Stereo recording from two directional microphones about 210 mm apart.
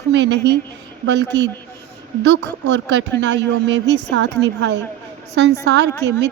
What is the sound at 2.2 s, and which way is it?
A woman's voice, 60° right (ahead or behind).